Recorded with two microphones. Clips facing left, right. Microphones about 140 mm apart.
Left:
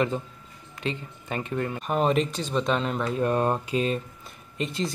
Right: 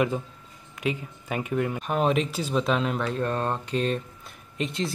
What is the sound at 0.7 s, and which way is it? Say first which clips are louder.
A man's voice: right 2 dB; 10° right (ahead or behind).